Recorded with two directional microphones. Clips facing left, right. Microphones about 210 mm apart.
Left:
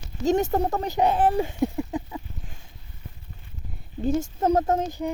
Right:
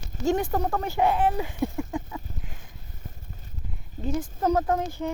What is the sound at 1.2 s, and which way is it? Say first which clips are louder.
Speech: left 3 dB; 30° left (ahead or behind).